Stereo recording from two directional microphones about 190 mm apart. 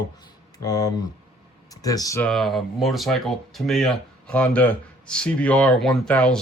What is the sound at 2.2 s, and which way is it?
Speech, centre (ahead or behind).